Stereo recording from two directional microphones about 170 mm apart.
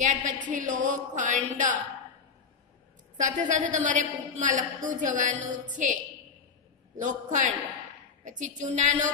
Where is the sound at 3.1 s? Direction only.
45° right (ahead or behind).